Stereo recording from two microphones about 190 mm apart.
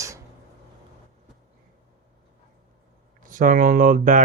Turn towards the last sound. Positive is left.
turn(degrees=-45)  # may be behind; listen again after turning